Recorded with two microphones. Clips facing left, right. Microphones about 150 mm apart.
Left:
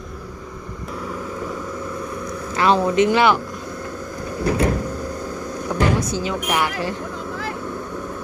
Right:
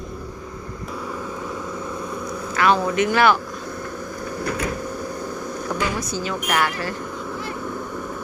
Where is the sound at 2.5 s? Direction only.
30° left (ahead or behind).